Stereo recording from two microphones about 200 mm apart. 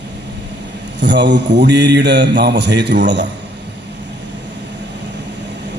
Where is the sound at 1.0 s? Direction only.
60° right (ahead or behind).